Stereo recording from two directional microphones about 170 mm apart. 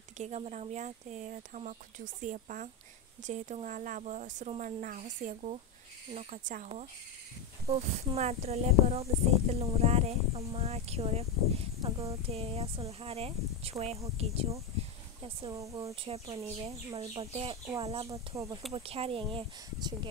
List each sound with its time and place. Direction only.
0.2 s speech: 40° right (ahead or behind)
11.8 s speech: 20° right (ahead or behind)
12.3 s speech: 35° right (ahead or behind)
14.8 s a sound: 35° right (ahead or behind)
15.5 s speech: 20° right (ahead or behind)
15.9 s speech: 35° right (ahead or behind)
18.1 s speech: 20° right (ahead or behind)
18.7 s speech: 35° right (ahead or behind)